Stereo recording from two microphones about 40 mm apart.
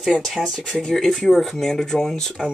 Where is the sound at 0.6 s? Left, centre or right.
Centre.